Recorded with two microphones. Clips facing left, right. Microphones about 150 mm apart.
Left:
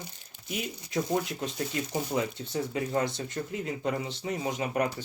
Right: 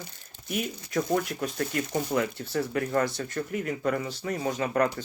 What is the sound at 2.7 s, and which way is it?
Speech, 65° right (ahead or behind).